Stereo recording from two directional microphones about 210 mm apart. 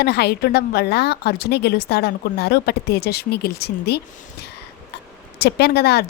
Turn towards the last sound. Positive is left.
turn(degrees=50)  # may be behind; listen again after turning